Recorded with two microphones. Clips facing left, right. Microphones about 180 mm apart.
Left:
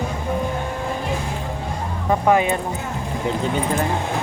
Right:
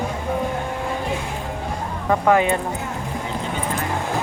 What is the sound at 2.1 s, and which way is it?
Speech, 20° left (ahead or behind).